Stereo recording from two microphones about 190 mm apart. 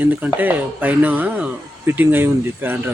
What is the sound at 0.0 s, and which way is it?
Speech, 10° right (ahead or behind).